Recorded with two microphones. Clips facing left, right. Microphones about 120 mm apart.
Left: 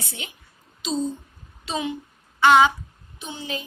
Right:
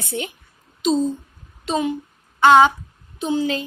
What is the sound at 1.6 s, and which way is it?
Speech, 45° right (ahead or behind).